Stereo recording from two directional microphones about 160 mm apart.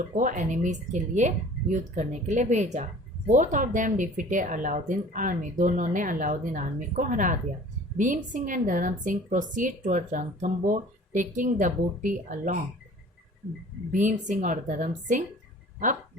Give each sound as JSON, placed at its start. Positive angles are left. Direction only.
{"t": 0.2, "sound": "a woman's voice", "side_deg": -55}
{"t": 13.9, "sound": "a woman's voice", "side_deg": -50}